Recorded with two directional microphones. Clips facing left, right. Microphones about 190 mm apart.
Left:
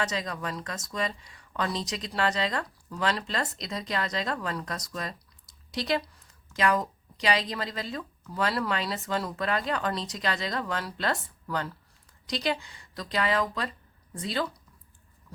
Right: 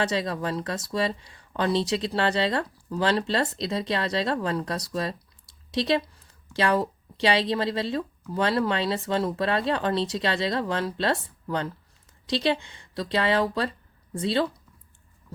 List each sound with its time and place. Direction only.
0.0 s speech: 30° right (ahead or behind)